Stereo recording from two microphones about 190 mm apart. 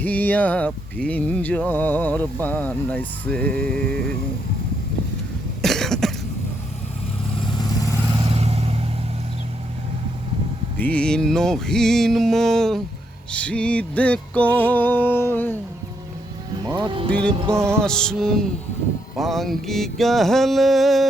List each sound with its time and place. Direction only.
0.0 s speech: 10° left (ahead or behind)
5.6 s cough: centre (ahead or behind)
7.5 s vehicle: 20° left (ahead or behind)
8.2 s vehicle: 30° right (ahead or behind)
10.8 s music: 5° left (ahead or behind)
13.3 s speech: 5° left (ahead or behind)
16.6 s speech: 20° right (ahead or behind)
17.5 s music: 15° right (ahead or behind)
17.7 s music: 5° left (ahead or behind)